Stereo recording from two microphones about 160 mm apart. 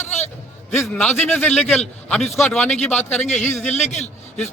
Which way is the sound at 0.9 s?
10° left (ahead or behind).